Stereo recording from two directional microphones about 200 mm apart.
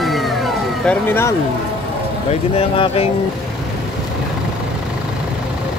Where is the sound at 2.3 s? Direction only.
30° left (ahead or behind).